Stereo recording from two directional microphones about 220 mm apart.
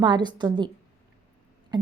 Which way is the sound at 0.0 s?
20° right (ahead or behind).